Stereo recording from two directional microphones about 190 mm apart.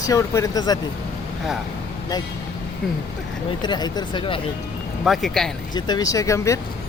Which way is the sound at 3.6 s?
25° left (ahead or behind).